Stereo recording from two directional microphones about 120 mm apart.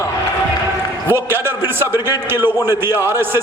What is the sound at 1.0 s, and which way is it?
A man's voice, 20° right (ahead or behind).